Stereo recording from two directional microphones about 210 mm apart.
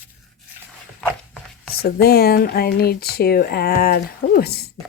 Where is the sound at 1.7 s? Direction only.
45° left (ahead or behind).